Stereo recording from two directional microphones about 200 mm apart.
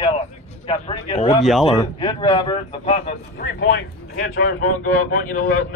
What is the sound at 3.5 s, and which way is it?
Speech, 60° left (ahead or behind).